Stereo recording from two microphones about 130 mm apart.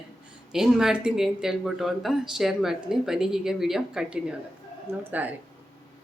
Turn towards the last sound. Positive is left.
turn(degrees=-15)  # may be behind; listen again after turning